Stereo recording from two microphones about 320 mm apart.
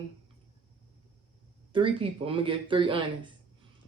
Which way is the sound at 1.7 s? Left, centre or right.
Centre.